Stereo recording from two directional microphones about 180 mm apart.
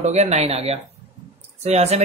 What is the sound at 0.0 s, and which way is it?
Speech, 40° right (ahead or behind).